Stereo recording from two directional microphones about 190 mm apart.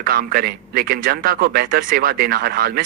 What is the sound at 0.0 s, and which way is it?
A man's voice, 50° right (ahead or behind).